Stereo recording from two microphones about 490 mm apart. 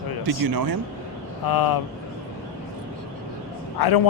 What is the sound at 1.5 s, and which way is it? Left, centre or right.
Speech, left.